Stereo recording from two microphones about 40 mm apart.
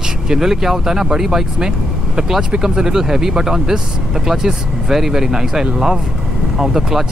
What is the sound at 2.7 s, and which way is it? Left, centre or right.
Speech, centre.